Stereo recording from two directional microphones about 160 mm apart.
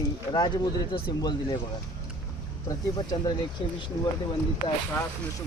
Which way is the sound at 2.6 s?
25° left (ahead or behind).